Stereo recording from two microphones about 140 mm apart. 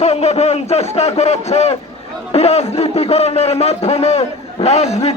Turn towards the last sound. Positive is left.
turn(degrees=50)  # may be behind; listen again after turning